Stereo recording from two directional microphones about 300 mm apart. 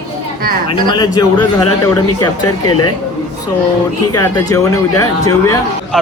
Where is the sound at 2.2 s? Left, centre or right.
Left.